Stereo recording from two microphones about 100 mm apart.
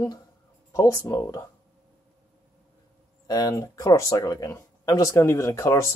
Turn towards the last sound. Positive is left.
turn(degrees=30)  # may be behind; listen again after turning